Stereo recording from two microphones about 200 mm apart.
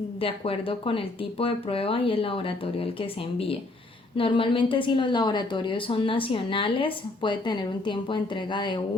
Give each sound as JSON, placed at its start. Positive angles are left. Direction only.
{"t": 0.2, "sound": "a woman's voice", "side_deg": 30}